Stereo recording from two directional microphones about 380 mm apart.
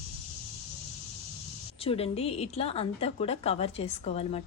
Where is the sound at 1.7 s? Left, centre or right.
Centre.